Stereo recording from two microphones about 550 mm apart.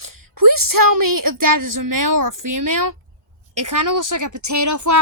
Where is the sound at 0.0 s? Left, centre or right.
Right.